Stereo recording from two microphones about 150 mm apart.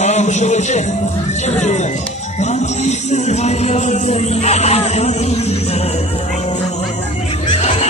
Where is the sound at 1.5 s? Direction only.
50° left (ahead or behind).